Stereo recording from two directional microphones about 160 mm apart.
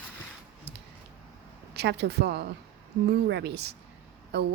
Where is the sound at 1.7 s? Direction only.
90° right.